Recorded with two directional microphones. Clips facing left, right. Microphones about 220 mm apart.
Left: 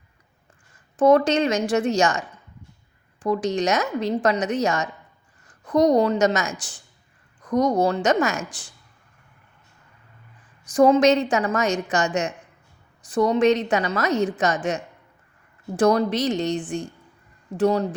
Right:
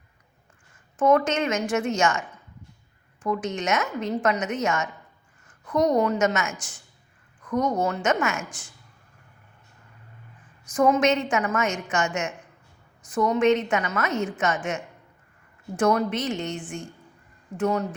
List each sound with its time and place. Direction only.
0.9 s a woman's voice: 35° left (ahead or behind)
10.7 s a woman's voice: 30° left (ahead or behind)